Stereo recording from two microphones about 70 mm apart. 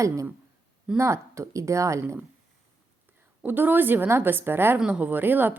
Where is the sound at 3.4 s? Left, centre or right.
Right.